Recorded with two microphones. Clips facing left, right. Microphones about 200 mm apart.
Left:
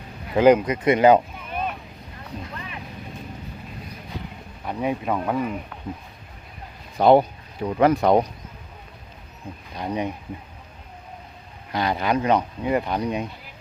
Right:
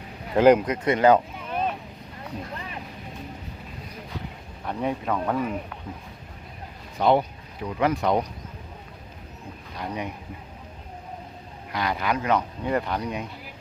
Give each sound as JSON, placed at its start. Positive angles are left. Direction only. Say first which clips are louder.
{"t": 0.3, "sound": "speech", "louder": "left 1 dB", "side_deg": 0}
{"t": 0.9, "sound": "speech", "louder": "left 3 dB", "side_deg": 15}
{"t": 4.6, "sound": "speech", "louder": "left 2 dB", "side_deg": 10}
{"t": 7.0, "sound": "speech", "louder": "left 5 dB", "side_deg": 40}
{"t": 9.7, "sound": "speech", "louder": "left 5 dB", "side_deg": 20}
{"t": 11.7, "sound": "speech", "louder": "left 4 dB", "side_deg": 25}